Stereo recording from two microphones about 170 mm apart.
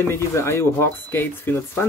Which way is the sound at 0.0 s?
15° left (ahead or behind).